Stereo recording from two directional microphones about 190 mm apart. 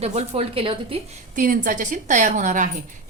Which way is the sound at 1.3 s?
45° right (ahead or behind).